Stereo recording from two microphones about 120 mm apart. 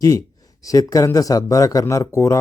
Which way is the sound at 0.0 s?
30° left (ahead or behind).